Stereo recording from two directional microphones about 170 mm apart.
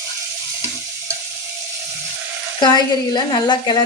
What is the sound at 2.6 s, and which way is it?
Speech, 25° left (ahead or behind).